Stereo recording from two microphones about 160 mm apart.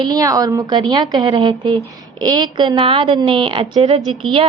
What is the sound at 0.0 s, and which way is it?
A woman's voice, 25° right (ahead or behind).